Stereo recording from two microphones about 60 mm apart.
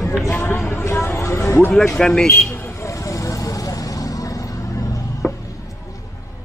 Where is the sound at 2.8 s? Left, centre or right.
Left.